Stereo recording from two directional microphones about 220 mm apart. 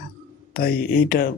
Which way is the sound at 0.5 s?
40° left (ahead or behind).